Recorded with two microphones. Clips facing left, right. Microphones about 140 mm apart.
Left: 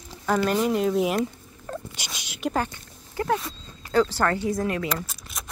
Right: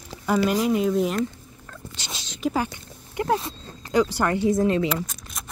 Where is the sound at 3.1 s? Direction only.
25° right (ahead or behind).